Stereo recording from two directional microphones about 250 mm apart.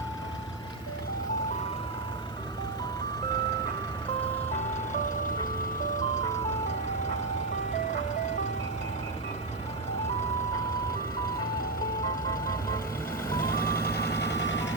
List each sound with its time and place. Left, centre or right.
13.4 s vehicle: left